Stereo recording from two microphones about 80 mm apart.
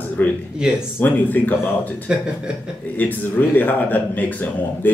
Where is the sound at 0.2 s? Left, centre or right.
Left.